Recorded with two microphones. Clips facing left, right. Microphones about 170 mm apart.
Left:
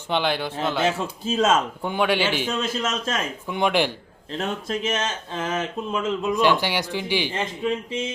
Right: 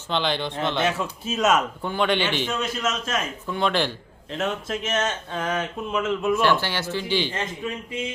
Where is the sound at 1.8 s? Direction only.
10° left (ahead or behind).